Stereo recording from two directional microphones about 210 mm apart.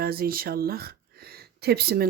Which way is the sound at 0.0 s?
45° right (ahead or behind).